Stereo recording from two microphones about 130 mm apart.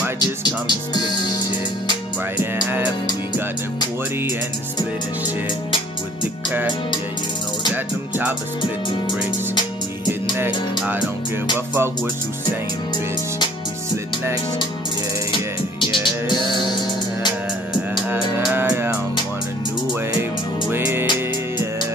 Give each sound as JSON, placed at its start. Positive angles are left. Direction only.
{"t": 0.2, "sound": "speech", "side_deg": 35}
{"t": 2.3, "sound": "music", "side_deg": -15}
{"t": 7.7, "sound": "music", "side_deg": -15}
{"t": 11.5, "sound": "music", "side_deg": -15}
{"t": 15.3, "sound": "music", "side_deg": 40}
{"t": 18.5, "sound": "music", "side_deg": -20}
{"t": 20.7, "sound": "music", "side_deg": -15}